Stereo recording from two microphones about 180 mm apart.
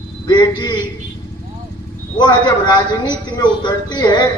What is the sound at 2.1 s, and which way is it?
A man's voice, 25° left (ahead or behind).